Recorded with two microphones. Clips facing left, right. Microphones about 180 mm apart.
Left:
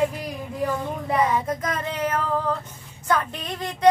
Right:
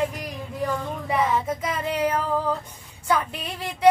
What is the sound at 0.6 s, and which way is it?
Speech, centre (ahead or behind).